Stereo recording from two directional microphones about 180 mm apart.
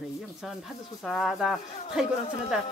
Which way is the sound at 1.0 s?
Centre (ahead or behind).